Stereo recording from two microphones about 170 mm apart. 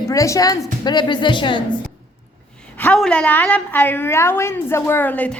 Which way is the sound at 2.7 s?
5° left (ahead or behind).